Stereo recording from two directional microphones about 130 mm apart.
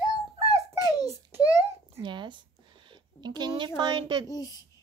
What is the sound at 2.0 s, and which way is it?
A woman's voice, 35° right (ahead or behind).